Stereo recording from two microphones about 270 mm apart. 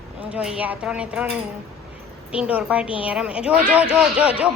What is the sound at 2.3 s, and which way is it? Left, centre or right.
Speech, centre.